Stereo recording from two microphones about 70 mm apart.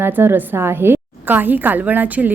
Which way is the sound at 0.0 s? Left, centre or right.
Right.